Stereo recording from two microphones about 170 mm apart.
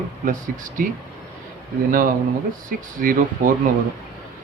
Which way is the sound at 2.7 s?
55° right (ahead or behind).